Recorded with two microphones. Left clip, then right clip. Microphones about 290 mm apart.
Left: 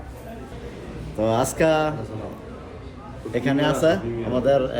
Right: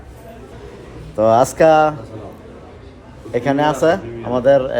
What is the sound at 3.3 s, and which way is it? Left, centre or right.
A man's voice, right.